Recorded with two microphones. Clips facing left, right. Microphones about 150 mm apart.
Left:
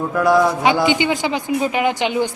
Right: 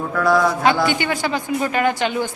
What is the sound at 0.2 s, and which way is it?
A man's voice, 15° left (ahead or behind).